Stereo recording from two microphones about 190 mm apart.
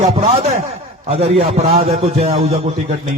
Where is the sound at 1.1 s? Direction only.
30° right (ahead or behind).